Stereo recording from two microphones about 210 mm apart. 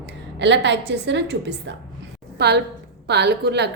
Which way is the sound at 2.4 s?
50° right (ahead or behind).